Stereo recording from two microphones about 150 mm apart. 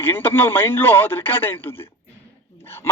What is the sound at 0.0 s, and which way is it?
A man's voice, 15° left (ahead or behind).